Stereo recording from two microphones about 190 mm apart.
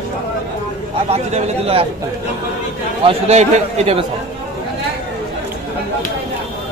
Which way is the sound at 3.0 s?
35° right (ahead or behind).